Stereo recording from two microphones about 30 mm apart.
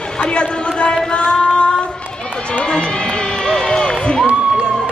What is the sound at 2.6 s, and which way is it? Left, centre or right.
Run, left.